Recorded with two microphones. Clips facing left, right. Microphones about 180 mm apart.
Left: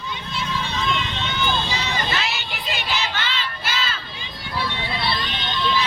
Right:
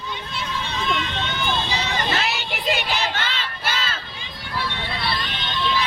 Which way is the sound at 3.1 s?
50° right (ahead or behind).